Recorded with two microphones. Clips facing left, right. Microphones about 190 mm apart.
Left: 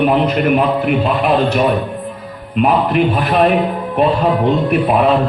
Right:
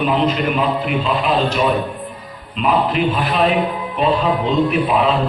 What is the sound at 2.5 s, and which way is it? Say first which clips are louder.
A man's voice: left 4 dB; 60° left (ahead or behind).